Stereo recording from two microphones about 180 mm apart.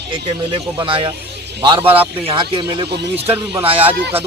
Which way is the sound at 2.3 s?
30° right (ahead or behind).